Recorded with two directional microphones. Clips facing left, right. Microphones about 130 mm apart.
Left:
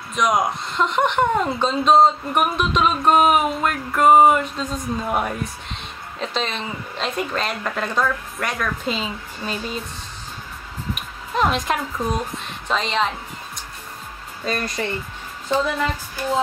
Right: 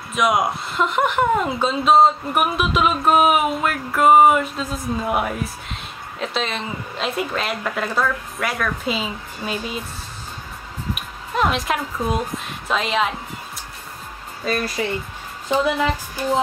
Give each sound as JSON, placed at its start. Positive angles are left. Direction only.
{"t": 0.1, "sound": "speech", "side_deg": -5}
{"t": 11.0, "sound": "speech", "side_deg": 0}
{"t": 14.4, "sound": "speech", "side_deg": -5}
{"t": 15.5, "sound": "speech", "side_deg": -15}